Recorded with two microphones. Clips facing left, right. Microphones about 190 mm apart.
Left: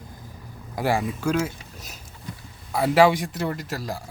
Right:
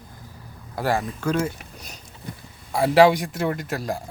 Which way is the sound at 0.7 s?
15° left (ahead or behind).